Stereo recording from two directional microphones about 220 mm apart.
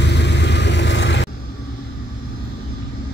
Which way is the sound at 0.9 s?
55° left (ahead or behind).